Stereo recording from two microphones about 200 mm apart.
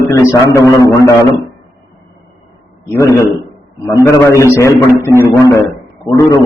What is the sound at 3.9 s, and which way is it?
Speech, 15° left (ahead or behind).